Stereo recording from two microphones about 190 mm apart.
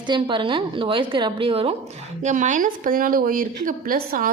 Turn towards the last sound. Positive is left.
turn(degrees=-50)  # may be behind; listen again after turning